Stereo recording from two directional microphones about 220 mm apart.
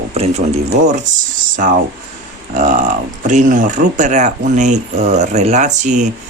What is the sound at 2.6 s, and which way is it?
Speech, 35° right (ahead or behind).